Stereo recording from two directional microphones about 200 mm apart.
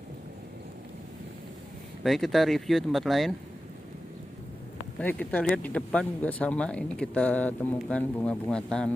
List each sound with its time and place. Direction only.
2.0 s speech: centre (ahead or behind)
5.0 s speech: 5° left (ahead or behind)